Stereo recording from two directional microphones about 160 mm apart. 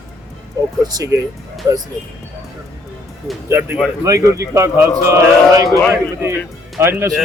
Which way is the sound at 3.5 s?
15° right (ahead or behind).